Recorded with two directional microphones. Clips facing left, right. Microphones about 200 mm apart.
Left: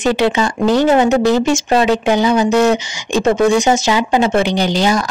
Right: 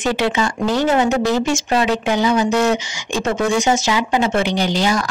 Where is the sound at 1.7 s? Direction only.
30° left (ahead or behind).